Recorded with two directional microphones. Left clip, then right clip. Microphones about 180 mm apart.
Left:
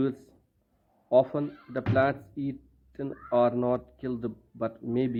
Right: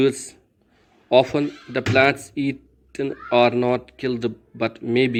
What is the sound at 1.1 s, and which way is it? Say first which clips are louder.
Speech: right 7 dB; 20° right (ahead or behind).